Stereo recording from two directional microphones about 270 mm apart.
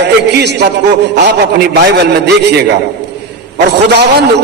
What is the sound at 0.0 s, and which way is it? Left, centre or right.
A man's voice, right.